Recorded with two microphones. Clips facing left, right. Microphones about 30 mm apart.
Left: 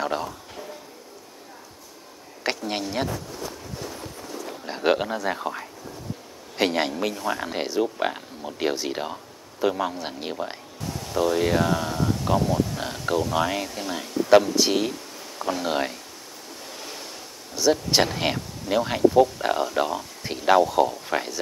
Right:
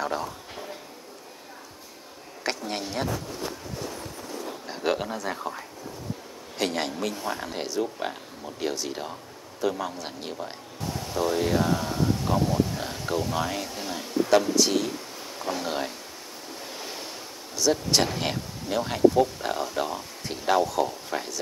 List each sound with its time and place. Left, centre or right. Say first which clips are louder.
0.0 s speech: left 2 dB; centre
2.4 s speech: left 3 dB; centre
4.6 s speech: left 5 dB; left
10.8 s a sound: right 1 dB; centre
11.1 s speech: left 3 dB; centre
11.9 s a sound: even; centre
12.3 s speech: left 5 dB; centre
14.9 s a sound: even; centre
15.6 s speech: left 4 dB; left
16.7 s waves: even; centre
17.6 s speech: left 3 dB; centre